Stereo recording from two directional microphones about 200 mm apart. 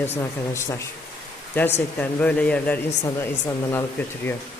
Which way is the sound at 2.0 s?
5° left (ahead or behind).